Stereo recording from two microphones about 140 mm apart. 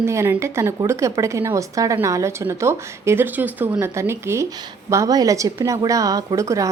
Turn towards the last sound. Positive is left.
turn(degrees=-20)  # may be behind; listen again after turning